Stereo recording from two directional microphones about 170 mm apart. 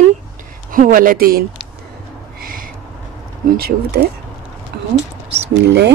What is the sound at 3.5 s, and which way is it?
Speech, 65° right (ahead or behind).